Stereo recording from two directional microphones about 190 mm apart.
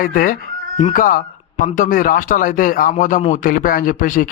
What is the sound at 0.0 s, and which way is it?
A man's voice, 45° left (ahead or behind).